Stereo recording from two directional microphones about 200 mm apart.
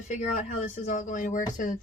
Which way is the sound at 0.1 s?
40° left (ahead or behind).